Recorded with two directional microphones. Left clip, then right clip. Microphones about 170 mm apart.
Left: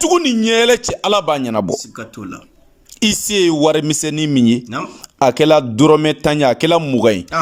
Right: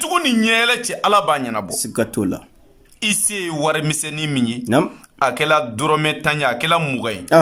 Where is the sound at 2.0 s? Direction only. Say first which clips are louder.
Right 10 dB; 40° right (ahead or behind).